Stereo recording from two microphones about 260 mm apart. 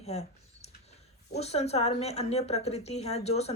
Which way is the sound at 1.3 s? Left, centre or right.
Left.